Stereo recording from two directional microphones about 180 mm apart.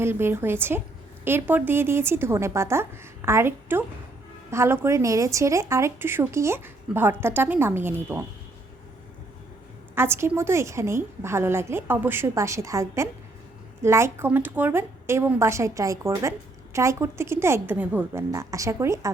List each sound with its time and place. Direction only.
0.0 s speech: 15° right (ahead or behind)
9.9 s speech: 15° right (ahead or behind)